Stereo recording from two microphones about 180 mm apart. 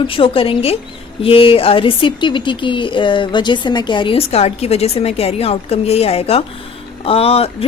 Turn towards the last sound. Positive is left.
turn(degrees=35)  # may be behind; listen again after turning